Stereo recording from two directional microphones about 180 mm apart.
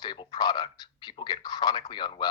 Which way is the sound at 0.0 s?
25° left (ahead or behind).